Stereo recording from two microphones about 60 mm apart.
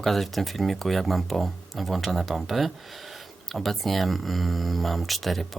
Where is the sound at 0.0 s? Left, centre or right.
Centre.